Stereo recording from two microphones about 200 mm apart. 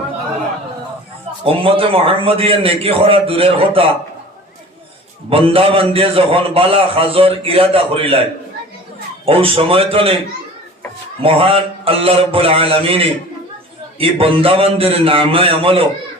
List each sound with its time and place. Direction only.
1.5 s a man's voice: 30° right (ahead or behind)
5.3 s a man's voice: 30° right (ahead or behind)
9.2 s a man's voice: 30° right (ahead or behind)
11.2 s a man's voice: 25° right (ahead or behind)